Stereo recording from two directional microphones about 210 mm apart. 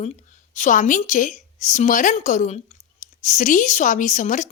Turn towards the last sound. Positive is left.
turn(degrees=35)  # may be behind; listen again after turning